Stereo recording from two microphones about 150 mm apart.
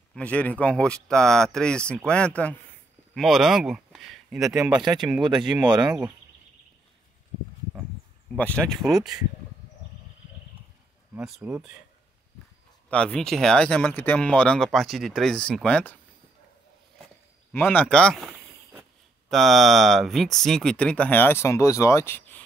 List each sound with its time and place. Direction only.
0.1 s speech: 10° left (ahead or behind)
4.6 s speech: 25° right (ahead or behind)
4.8 s speech: 5° right (ahead or behind)
8.4 s speech: 10° left (ahead or behind)
11.1 s speech: 5° right (ahead or behind)
12.9 s speech: 5° left (ahead or behind)
17.5 s speech: 10° left (ahead or behind)